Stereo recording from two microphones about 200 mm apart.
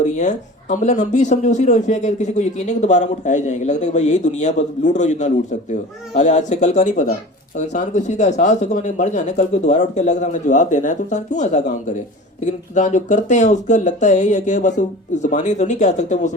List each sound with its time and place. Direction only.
0.0 s speech: 35° left (ahead or behind)